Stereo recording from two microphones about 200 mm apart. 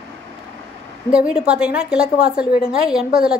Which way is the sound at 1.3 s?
5° right (ahead or behind).